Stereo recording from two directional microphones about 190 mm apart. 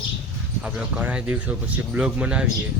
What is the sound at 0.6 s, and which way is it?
Speech, 5° right (ahead or behind).